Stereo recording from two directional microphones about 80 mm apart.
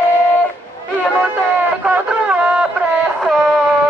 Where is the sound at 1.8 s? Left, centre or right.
Centre.